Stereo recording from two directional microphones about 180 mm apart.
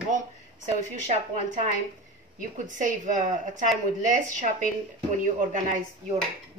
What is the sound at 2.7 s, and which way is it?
Speech, 45° right (ahead or behind).